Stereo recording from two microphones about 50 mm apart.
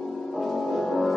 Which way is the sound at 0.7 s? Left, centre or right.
Centre.